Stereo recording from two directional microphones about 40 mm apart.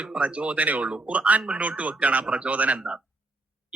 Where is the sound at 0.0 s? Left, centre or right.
Right.